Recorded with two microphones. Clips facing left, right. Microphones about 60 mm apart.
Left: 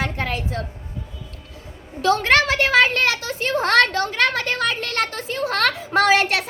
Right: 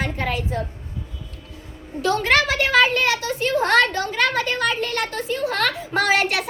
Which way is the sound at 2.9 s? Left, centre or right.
Left.